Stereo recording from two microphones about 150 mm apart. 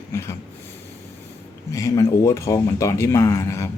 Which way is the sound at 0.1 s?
20° left (ahead or behind).